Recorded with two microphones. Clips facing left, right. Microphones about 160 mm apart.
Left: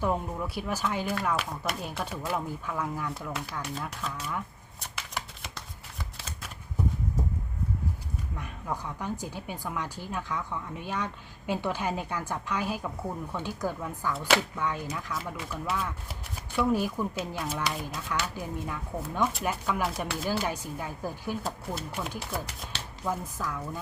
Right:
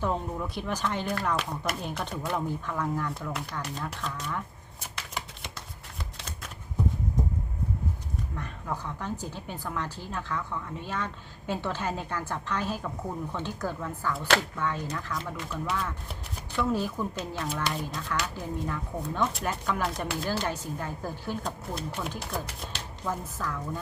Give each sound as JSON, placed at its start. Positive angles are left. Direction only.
{"t": 0.0, "sound": "speech", "side_deg": 10}
{"t": 6.1, "sound": "shuffling cards", "side_deg": 5}
{"t": 8.4, "sound": "a woman's voice", "side_deg": 10}